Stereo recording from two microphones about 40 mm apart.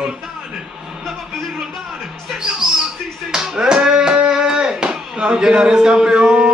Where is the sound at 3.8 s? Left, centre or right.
Centre.